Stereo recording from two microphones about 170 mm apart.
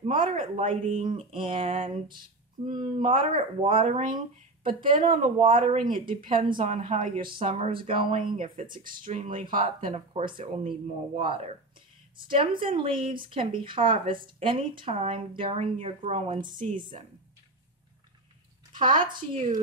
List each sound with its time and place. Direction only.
0.0 s a sound: 55° right (ahead or behind)
0.4 s speech: 45° right (ahead or behind)
2.7 s speech: 50° right (ahead or behind)
3.2 s speech: 30° right (ahead or behind)
3.8 s speech: 50° right (ahead or behind)
6.6 s speech: 40° right (ahead or behind)
7.2 s speech: 30° right (ahead or behind)
8.4 s speech: 50° right (ahead or behind)
18.7 s a sound: 30° right (ahead or behind)